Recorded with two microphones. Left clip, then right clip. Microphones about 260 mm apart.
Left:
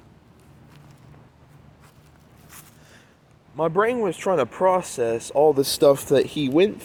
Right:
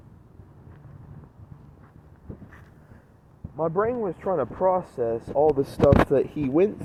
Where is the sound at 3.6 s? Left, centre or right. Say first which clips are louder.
Left 4 dB; centre.